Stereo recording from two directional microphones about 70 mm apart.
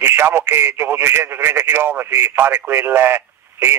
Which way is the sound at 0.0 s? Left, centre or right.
Right.